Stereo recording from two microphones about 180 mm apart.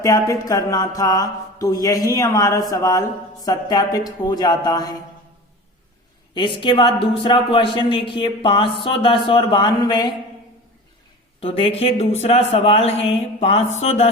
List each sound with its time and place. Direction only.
0.0 s speech: 20° left (ahead or behind)
6.3 s speech: 25° left (ahead or behind)
11.3 s a man's voice: 30° left (ahead or behind)